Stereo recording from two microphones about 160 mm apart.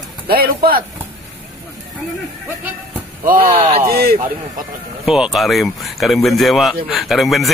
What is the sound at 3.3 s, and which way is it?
Speech, 65° right (ahead or behind).